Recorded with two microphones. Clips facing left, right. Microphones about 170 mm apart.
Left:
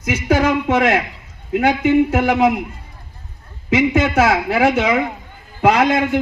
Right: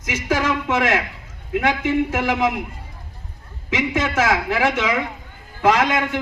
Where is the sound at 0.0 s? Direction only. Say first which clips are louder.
Left 5 dB; 60° left (ahead or behind).